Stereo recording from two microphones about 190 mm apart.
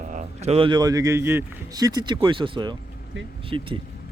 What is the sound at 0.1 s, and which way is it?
A man's voice, 40° right (ahead or behind).